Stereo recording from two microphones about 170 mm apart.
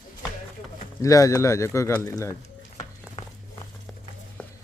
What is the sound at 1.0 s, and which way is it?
A man's voice, 20° left (ahead or behind).